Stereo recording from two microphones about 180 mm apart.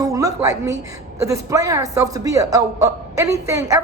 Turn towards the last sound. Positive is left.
turn(degrees=-15)  # may be behind; listen again after turning